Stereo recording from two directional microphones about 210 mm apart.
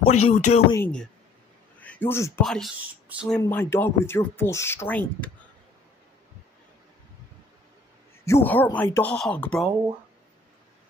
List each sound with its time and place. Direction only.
0.3 s speech: 30° left (ahead or behind)
0.7 s speech: 10° left (ahead or behind)
2.4 s speech: centre (ahead or behind)
3.3 s speech: 15° left (ahead or behind)
8.3 s speech: 10° left (ahead or behind)